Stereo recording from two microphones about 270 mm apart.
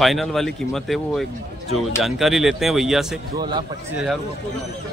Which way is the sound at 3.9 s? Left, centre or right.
Centre.